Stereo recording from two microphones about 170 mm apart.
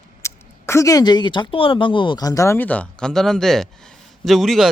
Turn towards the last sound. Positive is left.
turn(degrees=0)  # may be behind; listen again after turning